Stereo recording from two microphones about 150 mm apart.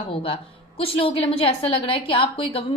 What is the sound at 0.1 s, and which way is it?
A woman's voice, 35° left (ahead or behind).